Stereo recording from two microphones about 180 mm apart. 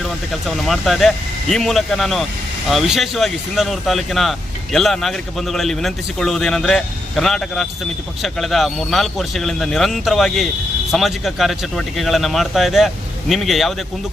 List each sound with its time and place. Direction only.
0.4 s speech: centre (ahead or behind)